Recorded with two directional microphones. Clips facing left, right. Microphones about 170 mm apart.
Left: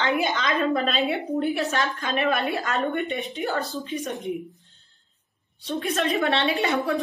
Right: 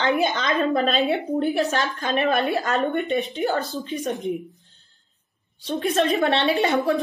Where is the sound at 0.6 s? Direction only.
35° right (ahead or behind).